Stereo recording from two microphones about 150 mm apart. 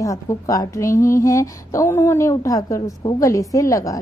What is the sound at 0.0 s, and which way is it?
A woman's voice, 20° left (ahead or behind).